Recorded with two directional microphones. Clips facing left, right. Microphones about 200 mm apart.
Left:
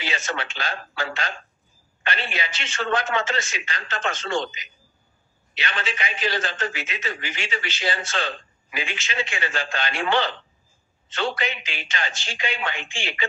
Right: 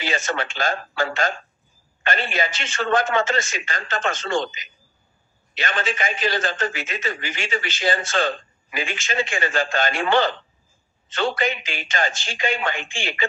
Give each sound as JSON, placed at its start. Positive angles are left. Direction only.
{"t": 0.0, "sound": "a man's voice", "side_deg": -45}